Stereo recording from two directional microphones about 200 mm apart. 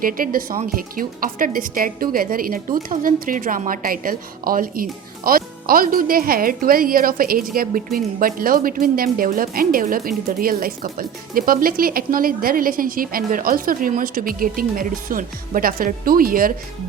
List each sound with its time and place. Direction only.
0.0 s a woman's voice: 45° right (ahead or behind)